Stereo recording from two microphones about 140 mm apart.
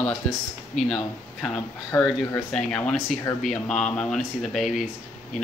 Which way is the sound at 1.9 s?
15° left (ahead or behind).